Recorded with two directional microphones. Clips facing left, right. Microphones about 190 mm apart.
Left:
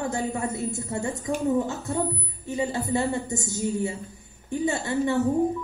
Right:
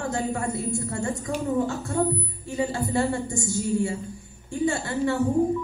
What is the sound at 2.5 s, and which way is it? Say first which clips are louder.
A woman's voice: right 1 dB; 20° left (ahead or behind).